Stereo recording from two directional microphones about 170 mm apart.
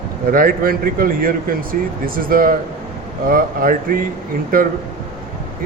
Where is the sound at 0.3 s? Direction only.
55° right (ahead or behind).